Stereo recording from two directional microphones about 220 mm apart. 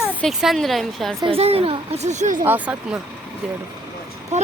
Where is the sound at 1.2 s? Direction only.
25° right (ahead or behind).